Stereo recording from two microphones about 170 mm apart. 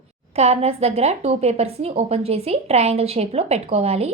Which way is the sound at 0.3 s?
40° right (ahead or behind).